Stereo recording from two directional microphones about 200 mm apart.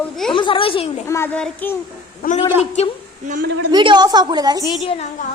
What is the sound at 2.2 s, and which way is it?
Speech, 50° left (ahead or behind).